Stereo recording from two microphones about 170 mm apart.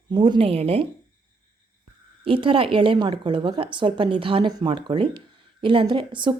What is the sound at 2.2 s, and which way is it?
A woman's voice, 30° right (ahead or behind).